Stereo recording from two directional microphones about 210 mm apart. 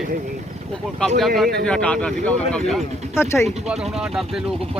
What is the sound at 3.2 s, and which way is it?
Speech, 15° left (ahead or behind).